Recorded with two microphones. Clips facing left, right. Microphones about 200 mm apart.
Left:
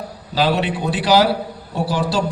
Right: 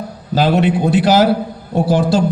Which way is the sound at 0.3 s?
50° right (ahead or behind).